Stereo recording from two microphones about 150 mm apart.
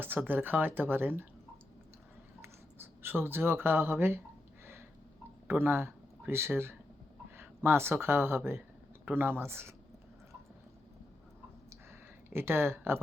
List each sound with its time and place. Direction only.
0.0 s speech: 15° right (ahead or behind)
2.4 s a sound: 15° right (ahead or behind)
5.5 s speech: 15° right (ahead or behind)
12.3 s speech: 15° right (ahead or behind)